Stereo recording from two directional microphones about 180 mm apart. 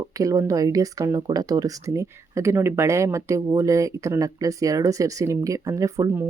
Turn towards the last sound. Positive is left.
turn(degrees=-15)  # may be behind; listen again after turning